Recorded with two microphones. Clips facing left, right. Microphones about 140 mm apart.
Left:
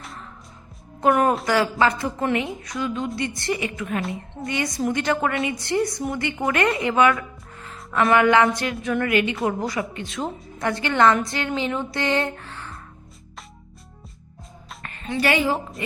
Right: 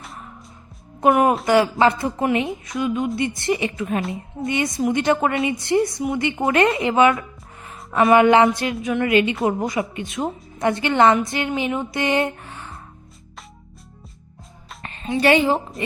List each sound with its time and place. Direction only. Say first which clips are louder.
1.5 s a woman's voice: right 4 dB; 20° right (ahead or behind)
14.8 s a woman's voice: right 4 dB; 20° right (ahead or behind)